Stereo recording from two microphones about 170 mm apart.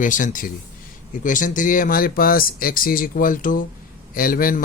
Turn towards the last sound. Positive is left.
turn(degrees=55)  # may be behind; listen again after turning